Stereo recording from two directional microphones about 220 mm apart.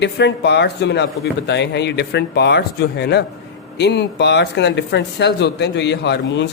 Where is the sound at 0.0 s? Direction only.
50° left (ahead or behind).